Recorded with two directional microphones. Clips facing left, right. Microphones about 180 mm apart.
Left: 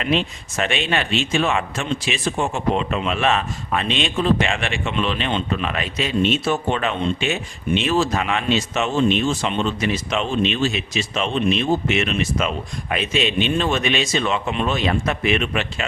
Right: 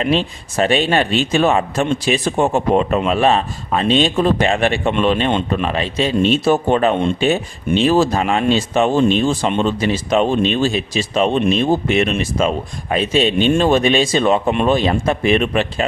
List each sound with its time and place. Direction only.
0.0 s a man's voice: 35° right (ahead or behind)
9.5 s speech: 50° right (ahead or behind)
9.8 s speech: 30° right (ahead or behind)
10.2 s a man's voice: 40° right (ahead or behind)
14.7 s a man's voice: 30° right (ahead or behind)